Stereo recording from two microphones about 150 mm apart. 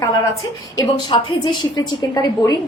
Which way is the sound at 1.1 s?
30° left (ahead or behind).